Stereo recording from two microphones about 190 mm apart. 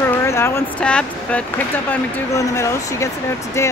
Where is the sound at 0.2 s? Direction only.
15° left (ahead or behind).